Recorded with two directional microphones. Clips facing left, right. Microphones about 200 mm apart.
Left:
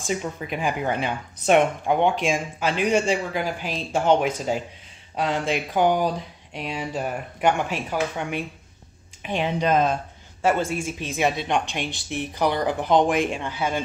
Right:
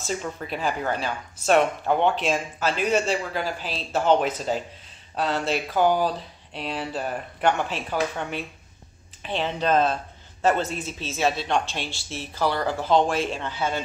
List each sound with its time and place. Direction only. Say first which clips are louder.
0.0 s speech: left 2 dB; 15° left (ahead or behind)